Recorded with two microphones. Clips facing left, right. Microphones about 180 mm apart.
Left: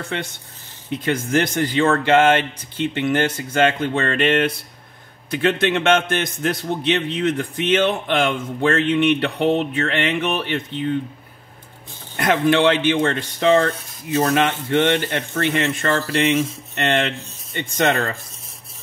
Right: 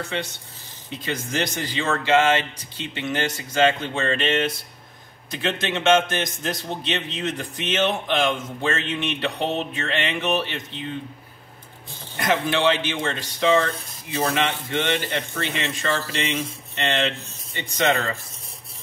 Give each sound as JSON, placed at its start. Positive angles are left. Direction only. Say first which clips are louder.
{"t": 0.8, "sound": "a man's voice", "louder": "left 7 dB", "side_deg": 55}
{"t": 12.2, "sound": "speech", "louder": "left 5 dB", "side_deg": 60}